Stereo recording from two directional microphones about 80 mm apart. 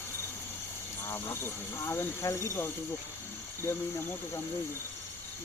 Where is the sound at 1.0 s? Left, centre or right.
Left.